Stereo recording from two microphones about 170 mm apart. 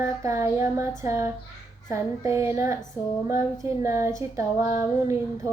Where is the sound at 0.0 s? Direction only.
15° right (ahead or behind).